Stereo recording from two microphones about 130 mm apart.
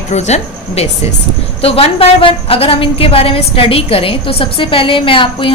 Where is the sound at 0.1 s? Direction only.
60° left (ahead or behind).